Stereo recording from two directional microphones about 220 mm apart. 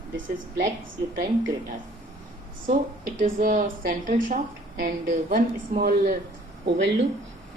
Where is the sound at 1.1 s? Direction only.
40° right (ahead or behind).